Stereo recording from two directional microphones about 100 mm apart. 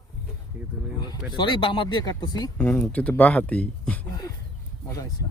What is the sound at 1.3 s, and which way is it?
Speech, 50° left (ahead or behind).